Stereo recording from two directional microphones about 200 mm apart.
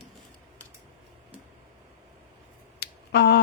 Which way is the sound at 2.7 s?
55° left (ahead or behind).